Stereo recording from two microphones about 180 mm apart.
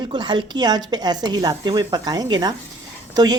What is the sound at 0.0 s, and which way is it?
Speech, 25° right (ahead or behind).